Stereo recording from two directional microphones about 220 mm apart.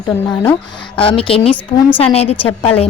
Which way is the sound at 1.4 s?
5° left (ahead or behind).